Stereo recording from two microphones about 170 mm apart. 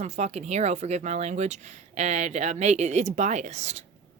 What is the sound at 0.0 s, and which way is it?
Speech, 40° right (ahead or behind).